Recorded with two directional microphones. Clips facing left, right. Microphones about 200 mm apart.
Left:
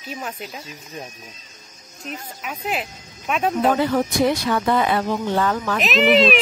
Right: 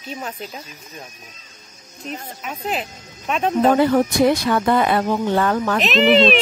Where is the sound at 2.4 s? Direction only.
Centre (ahead or behind).